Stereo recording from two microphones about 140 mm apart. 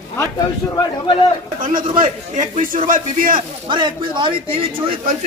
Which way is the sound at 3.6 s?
35° right (ahead or behind).